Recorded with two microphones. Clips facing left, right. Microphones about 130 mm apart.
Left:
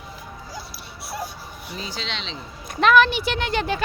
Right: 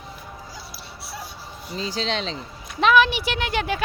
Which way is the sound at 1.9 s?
40° right (ahead or behind).